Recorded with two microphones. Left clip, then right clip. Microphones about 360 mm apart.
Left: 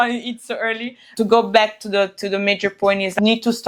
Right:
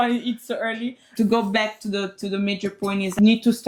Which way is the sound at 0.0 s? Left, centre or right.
Left.